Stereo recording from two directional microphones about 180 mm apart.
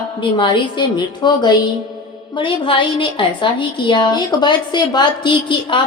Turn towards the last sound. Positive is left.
turn(degrees=25)  # may be behind; listen again after turning